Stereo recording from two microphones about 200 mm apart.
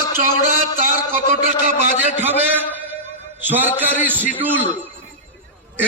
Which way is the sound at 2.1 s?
10° right (ahead or behind).